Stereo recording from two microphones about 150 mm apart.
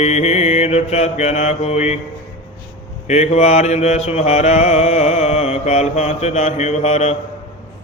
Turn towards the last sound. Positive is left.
turn(degrees=45)  # may be behind; listen again after turning